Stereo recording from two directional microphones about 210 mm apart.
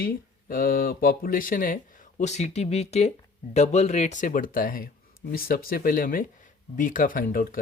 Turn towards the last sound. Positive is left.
turn(degrees=40)  # may be behind; listen again after turning